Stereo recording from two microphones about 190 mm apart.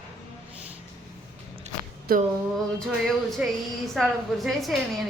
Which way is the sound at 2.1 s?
50° right (ahead or behind).